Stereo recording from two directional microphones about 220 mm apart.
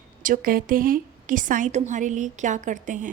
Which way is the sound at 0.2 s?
40° right (ahead or behind).